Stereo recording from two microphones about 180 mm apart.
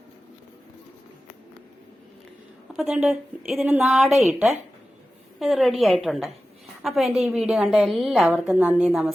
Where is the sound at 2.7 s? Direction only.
Centre (ahead or behind).